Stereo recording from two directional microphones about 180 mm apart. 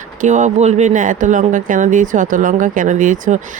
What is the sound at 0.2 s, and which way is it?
Speech, 45° right (ahead or behind).